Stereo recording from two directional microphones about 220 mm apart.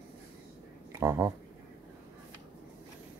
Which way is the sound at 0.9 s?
10° right (ahead or behind).